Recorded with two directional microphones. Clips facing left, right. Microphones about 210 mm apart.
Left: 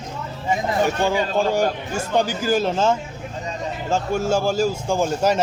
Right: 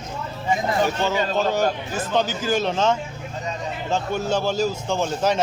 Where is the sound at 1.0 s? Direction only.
10° left (ahead or behind).